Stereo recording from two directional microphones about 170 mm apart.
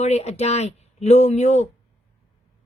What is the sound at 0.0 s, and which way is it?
Speech, 40° left (ahead or behind).